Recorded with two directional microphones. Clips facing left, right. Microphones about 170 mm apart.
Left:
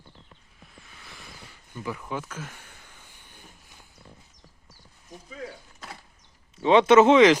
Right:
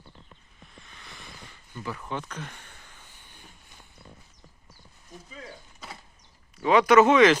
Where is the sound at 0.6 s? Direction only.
5° left (ahead or behind).